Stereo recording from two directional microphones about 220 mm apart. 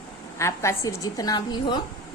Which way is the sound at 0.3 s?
15° left (ahead or behind).